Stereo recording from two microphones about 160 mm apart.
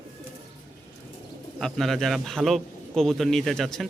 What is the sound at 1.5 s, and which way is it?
A man's voice, centre (ahead or behind).